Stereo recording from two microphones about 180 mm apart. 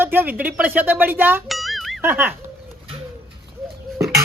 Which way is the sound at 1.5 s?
Centre (ahead or behind).